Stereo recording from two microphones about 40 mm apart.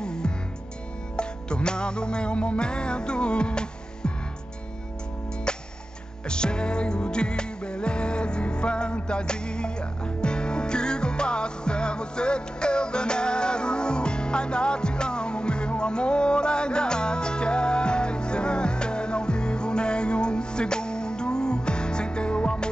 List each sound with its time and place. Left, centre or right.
0.0 s music: centre
6.2 s music: left